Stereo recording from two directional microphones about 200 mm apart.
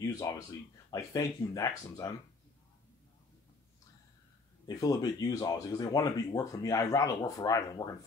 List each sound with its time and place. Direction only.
0.0 s speech: 15° left (ahead or behind)
4.6 s speech: 15° left (ahead or behind)